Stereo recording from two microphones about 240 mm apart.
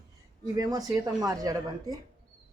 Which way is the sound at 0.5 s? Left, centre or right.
Centre.